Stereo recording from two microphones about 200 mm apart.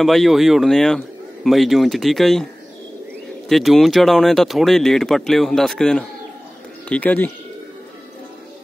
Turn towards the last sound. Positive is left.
turn(degrees=10)  # may be behind; listen again after turning